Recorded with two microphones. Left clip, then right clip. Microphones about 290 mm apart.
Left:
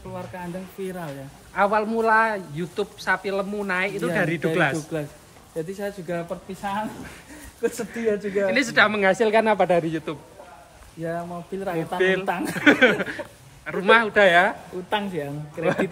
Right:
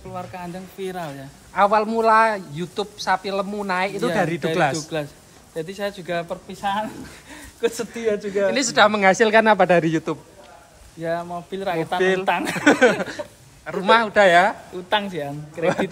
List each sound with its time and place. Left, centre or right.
0.1 s speech: centre
1.5 s a man's voice: right
14.9 s speech: centre